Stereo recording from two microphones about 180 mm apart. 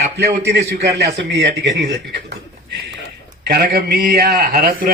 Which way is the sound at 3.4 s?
65° right (ahead or behind).